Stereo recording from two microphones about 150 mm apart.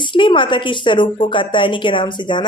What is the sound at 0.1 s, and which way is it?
A woman's voice, 35° left (ahead or behind).